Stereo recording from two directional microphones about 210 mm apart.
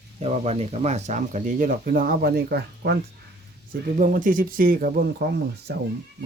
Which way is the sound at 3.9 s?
40° right (ahead or behind).